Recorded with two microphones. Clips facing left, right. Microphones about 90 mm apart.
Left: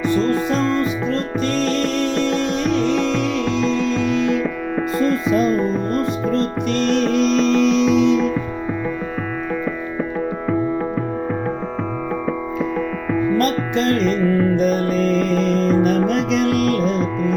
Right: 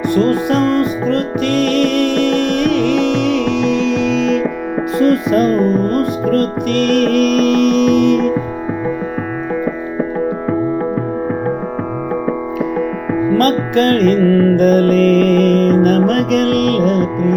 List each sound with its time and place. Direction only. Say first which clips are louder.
0.1 s music: right 6 dB; 60° right (ahead or behind); by 4.4 s 75° right (ahead or behind)
4.9 s music: right 6 dB; 65° right (ahead or behind)
13.1 s music: right 2 dB; 25° right (ahead or behind)
13.3 s music: right 8 dB; 55° right (ahead or behind)